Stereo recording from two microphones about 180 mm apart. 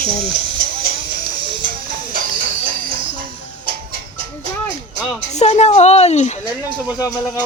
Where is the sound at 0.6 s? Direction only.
55° right (ahead or behind).